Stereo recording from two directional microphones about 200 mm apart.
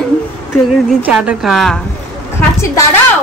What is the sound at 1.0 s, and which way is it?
Speech, 5° right (ahead or behind).